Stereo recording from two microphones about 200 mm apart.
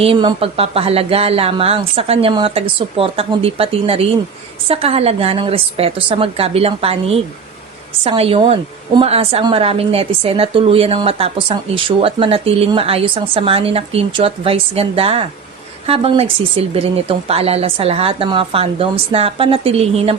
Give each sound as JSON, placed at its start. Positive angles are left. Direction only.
{"t": 0.0, "sound": "a woman's voice", "side_deg": -25}